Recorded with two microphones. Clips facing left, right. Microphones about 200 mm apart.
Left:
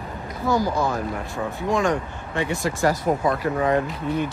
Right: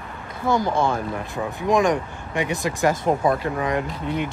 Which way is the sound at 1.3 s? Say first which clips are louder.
Right 4 dB; 20° right (ahead or behind).